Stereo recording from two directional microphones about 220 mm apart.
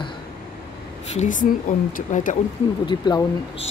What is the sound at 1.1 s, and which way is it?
Speech, 35° left (ahead or behind).